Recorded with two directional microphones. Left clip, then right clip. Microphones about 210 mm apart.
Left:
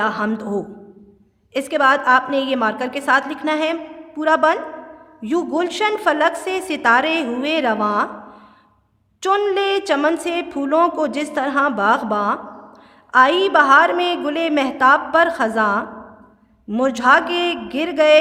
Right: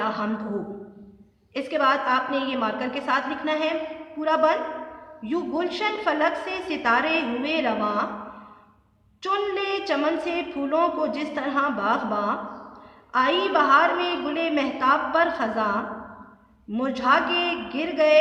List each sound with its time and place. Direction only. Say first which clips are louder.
0.0 s a sound: left 6 dB; 50° left (ahead or behind)
1.5 s a woman's voice: left 6 dB; 50° left (ahead or behind)
9.2 s a woman's voice: left 8 dB; 50° left (ahead or behind)